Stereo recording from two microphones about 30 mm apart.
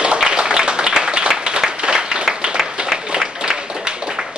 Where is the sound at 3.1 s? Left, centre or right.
Right.